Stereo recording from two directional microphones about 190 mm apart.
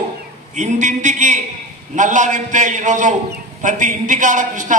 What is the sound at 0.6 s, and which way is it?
A man's voice, 40° right (ahead or behind).